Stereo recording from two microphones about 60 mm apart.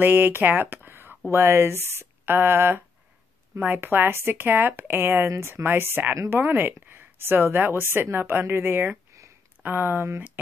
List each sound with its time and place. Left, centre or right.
0.0 s a woman's voice: right